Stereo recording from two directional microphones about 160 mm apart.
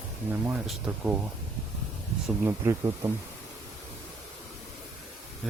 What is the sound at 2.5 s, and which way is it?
Speech, 15° right (ahead or behind).